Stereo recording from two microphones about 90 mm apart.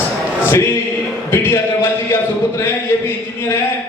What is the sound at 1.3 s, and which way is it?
Speech, 25° left (ahead or behind).